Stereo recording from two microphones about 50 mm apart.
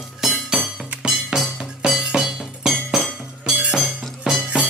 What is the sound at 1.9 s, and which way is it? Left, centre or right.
Music, centre.